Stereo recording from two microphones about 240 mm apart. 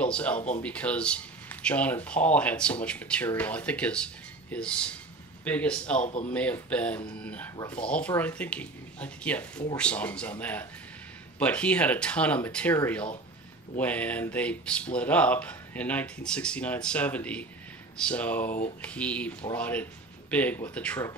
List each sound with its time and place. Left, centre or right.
0.0 s speech: centre
6.0 s speech: left
6.3 s speech: centre